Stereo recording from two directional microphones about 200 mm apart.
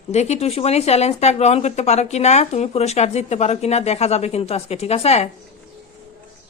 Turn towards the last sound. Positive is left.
turn(degrees=30)  # may be behind; listen again after turning